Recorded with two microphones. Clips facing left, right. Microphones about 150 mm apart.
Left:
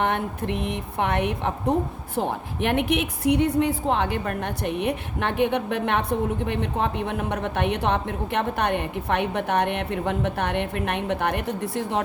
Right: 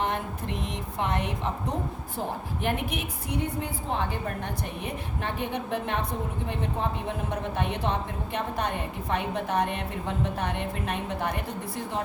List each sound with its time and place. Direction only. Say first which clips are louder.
0.0 s speech: left 5 dB; 65° left (ahead or behind)
2.1 s a woman's voice: left 7 dB; 75° left (ahead or behind)